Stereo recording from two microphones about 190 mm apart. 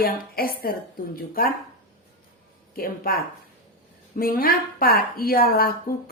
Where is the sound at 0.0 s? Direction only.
50° left (ahead or behind).